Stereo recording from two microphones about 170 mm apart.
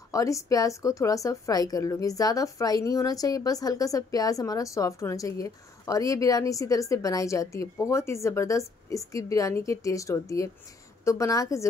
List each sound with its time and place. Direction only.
0.1 s a woman's voice: 20° left (ahead or behind)